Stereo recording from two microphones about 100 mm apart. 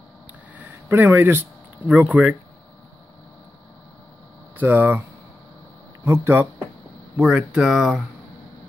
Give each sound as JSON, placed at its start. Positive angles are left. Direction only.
{"t": 0.6, "sound": "a sound", "side_deg": -20}
{"t": 1.9, "sound": "speech", "side_deg": -15}
{"t": 4.6, "sound": "speech", "side_deg": -20}
{"t": 6.0, "sound": "speech", "side_deg": -25}
{"t": 7.2, "sound": "speech", "side_deg": -15}